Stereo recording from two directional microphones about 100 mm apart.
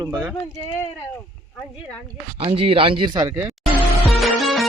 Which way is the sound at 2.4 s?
65° right (ahead or behind).